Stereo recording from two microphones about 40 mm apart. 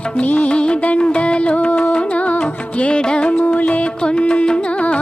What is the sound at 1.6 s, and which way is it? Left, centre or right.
Music, left.